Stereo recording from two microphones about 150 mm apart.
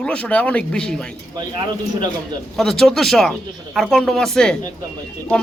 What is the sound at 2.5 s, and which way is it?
A man's voice, centre (ahead or behind).